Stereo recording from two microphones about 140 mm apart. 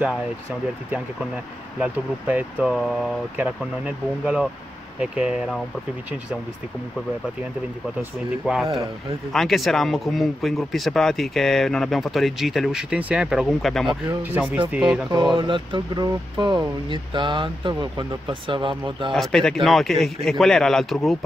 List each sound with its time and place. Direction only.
1.8 s speech: 10° right (ahead or behind)
8.5 s speech: 10° right (ahead or behind)
9.3 s speech: centre (ahead or behind)
14.2 s speech: 10° right (ahead or behind)
15.3 s speech: 35° right (ahead or behind)
19.1 s speech: 5° left (ahead or behind)